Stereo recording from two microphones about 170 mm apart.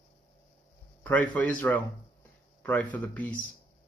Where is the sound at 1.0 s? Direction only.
10° left (ahead or behind).